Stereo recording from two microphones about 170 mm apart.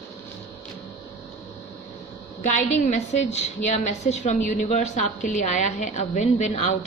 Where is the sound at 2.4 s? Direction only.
45° left (ahead or behind).